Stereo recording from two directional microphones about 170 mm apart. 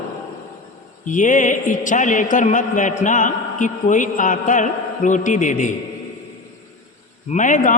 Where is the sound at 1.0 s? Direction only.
50° left (ahead or behind).